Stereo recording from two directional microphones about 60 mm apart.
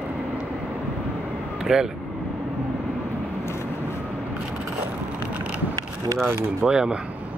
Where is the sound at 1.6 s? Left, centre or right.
Centre.